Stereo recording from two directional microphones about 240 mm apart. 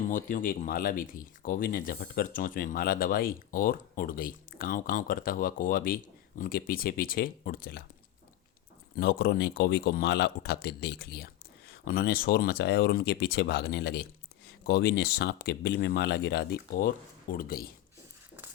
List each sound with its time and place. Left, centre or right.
0.1 s speech: left
9.0 s speech: left